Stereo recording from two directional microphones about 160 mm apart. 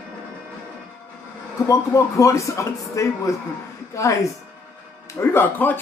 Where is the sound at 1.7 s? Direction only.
20° left (ahead or behind).